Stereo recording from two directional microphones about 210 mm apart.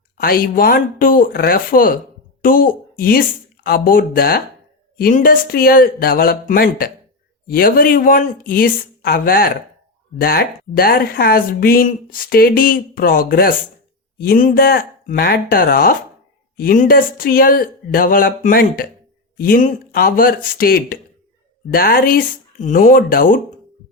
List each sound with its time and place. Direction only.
0.2 s speech: 45° left (ahead or behind)